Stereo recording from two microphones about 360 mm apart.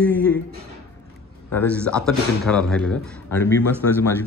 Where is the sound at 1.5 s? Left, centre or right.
Centre.